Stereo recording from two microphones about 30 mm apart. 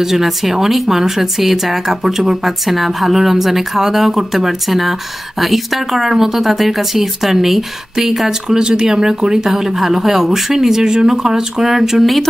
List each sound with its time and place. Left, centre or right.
0.0 s speech: centre
10.8 s speech: right